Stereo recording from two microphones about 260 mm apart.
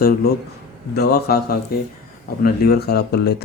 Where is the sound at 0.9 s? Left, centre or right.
Left.